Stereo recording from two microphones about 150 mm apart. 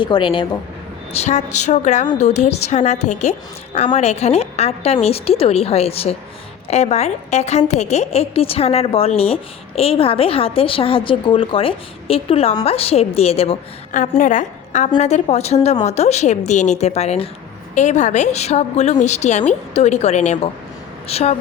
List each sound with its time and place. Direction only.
0.0 s a woman's voice: 30° left (ahead or behind)
1.1 s a woman's voice: 50° left (ahead or behind)
13.9 s a woman's voice: 60° left (ahead or behind); by 21.3 s 45° left (ahead or behind)